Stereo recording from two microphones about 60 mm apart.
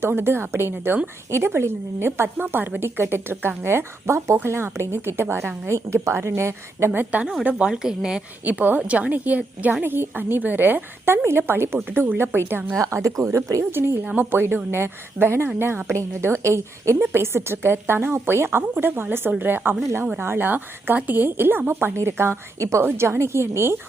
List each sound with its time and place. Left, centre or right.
0.0 s a woman's voice: right
6.9 s a woman's voice: right
7.6 s a woman's voice: centre
8.4 s a woman's voice: right
12.8 s speech: right
13.7 s a woman's voice: right
16.2 s a woman's voice: right
17.1 s a woman's voice: right